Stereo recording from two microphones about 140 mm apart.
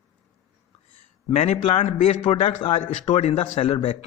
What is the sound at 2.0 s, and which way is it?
Speech, 40° left (ahead or behind).